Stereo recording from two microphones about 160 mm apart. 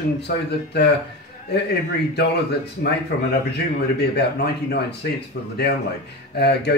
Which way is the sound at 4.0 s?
90° left.